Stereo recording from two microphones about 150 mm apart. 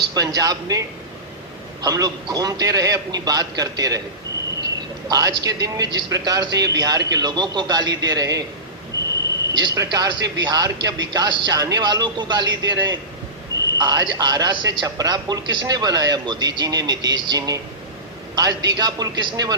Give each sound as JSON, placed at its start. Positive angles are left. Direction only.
{"t": 0.1, "sound": "a man's voice", "side_deg": -25}
{"t": 5.0, "sound": "a man's voice", "side_deg": -25}
{"t": 9.6, "sound": "a man's voice", "side_deg": -25}
{"t": 13.5, "sound": "a sound", "side_deg": -25}
{"t": 13.8, "sound": "a man's voice", "side_deg": -25}